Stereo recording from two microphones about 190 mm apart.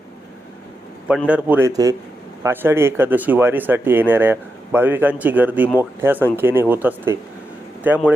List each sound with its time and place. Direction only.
1.3 s speech: 5° right (ahead or behind)